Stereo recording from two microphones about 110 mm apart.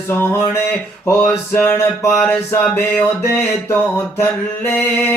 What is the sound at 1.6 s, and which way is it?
Mantra, 20° left (ahead or behind).